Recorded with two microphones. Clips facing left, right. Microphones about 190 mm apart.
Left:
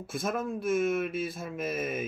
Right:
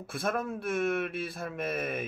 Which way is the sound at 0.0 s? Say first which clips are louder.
Even; centre (ahead or behind).